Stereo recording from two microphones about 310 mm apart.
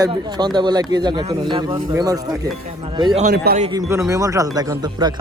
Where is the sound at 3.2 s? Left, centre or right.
Right.